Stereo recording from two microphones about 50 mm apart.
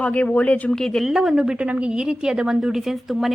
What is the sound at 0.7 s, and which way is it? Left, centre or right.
Speech, centre.